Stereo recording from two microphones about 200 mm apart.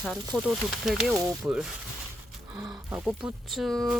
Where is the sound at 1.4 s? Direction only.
5° right (ahead or behind).